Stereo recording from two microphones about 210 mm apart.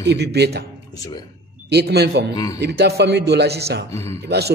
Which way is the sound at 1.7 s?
50° right (ahead or behind).